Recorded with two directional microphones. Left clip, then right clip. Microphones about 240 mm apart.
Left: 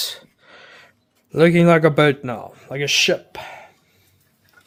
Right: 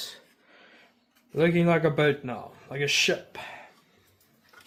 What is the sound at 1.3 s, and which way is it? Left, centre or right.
A man's voice, left.